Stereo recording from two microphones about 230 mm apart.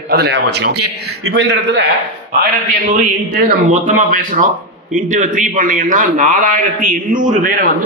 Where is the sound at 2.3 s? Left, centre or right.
Right.